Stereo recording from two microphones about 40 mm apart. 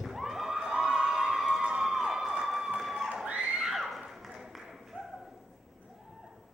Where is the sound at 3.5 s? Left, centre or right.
Centre.